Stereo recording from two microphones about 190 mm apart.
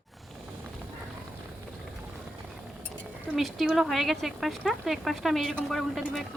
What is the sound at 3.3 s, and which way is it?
Speech, centre (ahead or behind).